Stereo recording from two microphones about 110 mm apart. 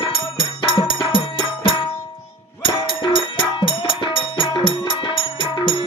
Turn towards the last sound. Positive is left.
turn(degrees=50)  # may be behind; listen again after turning